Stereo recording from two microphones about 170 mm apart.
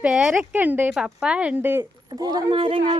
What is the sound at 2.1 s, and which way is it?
Speech, 25° right (ahead or behind).